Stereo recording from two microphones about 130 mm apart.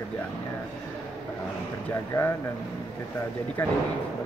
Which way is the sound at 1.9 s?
20° left (ahead or behind).